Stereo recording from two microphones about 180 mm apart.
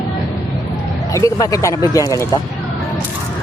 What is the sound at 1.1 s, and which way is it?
Speech, 20° left (ahead or behind).